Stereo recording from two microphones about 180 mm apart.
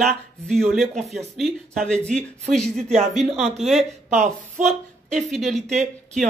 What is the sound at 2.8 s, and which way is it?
Speech, 40° right (ahead or behind).